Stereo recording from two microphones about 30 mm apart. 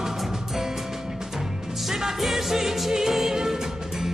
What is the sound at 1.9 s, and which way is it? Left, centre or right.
Music, centre.